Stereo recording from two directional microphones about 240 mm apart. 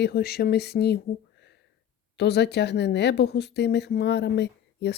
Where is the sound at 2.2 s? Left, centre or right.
Left.